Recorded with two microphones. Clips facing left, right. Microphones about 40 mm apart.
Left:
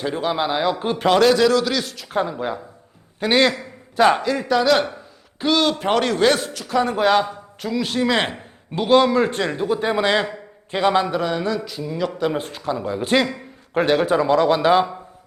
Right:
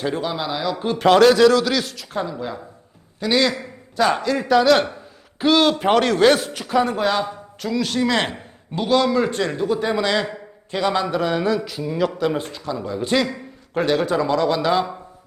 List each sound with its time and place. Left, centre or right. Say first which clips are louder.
0.2 s a man's voice: left 3 dB; left
0.9 s speech: right 3 dB; centre
3.2 s a man's voice: left 2 dB; left
3.9 s a man's voice: left 3 dB; left
4.2 s speech: right 2 dB; centre
8.7 s a man's voice: left 3 dB; left
9.4 s a man's voice: even; centre
11.1 s speech: right 2 dB; centre
12.5 s speech: left 2 dB; centre